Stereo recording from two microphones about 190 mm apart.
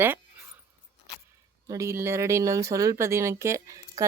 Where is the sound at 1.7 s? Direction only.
15° right (ahead or behind).